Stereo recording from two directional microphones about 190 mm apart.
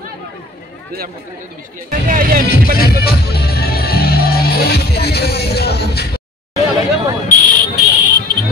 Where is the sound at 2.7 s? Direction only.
55° left (ahead or behind).